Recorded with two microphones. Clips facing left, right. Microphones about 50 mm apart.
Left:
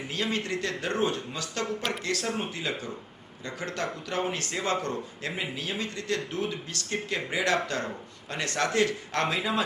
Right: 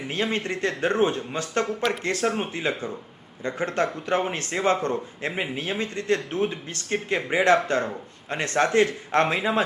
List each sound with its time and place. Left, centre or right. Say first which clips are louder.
0.1 s speech: right 4 dB; right